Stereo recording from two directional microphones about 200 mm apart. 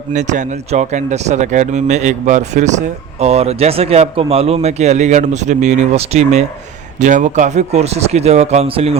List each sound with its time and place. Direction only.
0.1 s speech: 35° right (ahead or behind)